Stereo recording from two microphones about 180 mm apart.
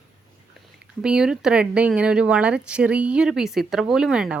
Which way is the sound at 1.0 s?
5° right (ahead or behind).